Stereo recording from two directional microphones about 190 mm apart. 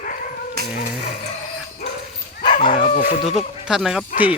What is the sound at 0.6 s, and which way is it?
Dog, 55° right (ahead or behind).